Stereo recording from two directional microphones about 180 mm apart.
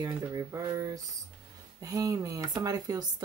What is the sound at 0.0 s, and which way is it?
Speech, 20° right (ahead or behind).